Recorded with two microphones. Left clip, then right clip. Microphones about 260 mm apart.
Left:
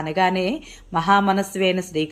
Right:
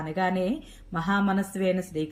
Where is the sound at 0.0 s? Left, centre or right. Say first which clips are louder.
Left 7 dB; left.